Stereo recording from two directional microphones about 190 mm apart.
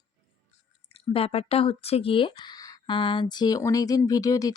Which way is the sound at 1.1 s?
30° left (ahead or behind).